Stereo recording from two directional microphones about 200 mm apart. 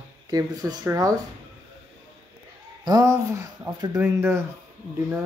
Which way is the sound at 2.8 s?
15° right (ahead or behind).